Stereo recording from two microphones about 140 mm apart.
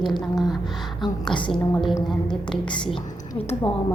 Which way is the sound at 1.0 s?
35° left (ahead or behind).